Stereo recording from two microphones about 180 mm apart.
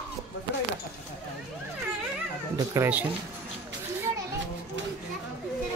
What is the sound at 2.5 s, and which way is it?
Speech, 15° right (ahead or behind).